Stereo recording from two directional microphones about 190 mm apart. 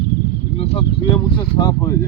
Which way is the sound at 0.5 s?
30° left (ahead or behind).